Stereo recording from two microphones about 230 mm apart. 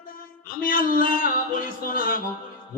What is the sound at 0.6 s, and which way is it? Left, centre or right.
Mantra, left.